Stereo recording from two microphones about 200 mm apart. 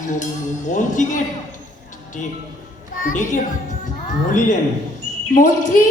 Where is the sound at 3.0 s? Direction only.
40° left (ahead or behind).